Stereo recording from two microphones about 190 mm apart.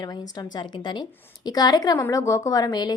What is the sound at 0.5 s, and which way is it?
A woman's voice, 25° left (ahead or behind).